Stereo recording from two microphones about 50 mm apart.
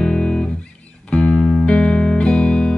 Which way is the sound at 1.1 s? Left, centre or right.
Left.